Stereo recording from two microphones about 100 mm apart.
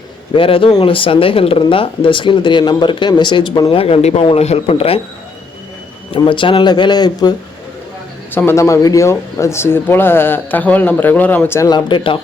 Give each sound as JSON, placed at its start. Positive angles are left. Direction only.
{"t": 0.3, "sound": "speech", "side_deg": 65}
{"t": 3.7, "sound": "speech", "side_deg": 75}
{"t": 6.1, "sound": "speech", "side_deg": 55}
{"t": 8.3, "sound": "speech", "side_deg": 20}
{"t": 11.7, "sound": "speech", "side_deg": 50}